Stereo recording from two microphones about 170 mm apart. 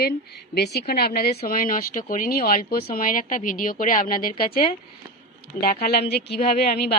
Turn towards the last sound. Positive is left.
turn(degrees=70)  # may be behind; listen again after turning